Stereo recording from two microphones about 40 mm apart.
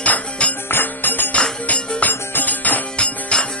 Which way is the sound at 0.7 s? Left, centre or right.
Left.